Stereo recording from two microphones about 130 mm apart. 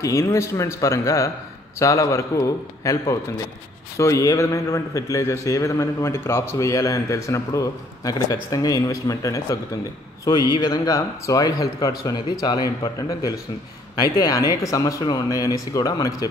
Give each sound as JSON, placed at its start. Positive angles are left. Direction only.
{"t": 0.0, "sound": "a man's voice", "side_deg": 20}